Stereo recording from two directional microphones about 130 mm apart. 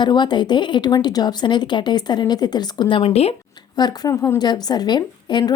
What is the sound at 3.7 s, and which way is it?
A woman's voice, 30° left (ahead or behind).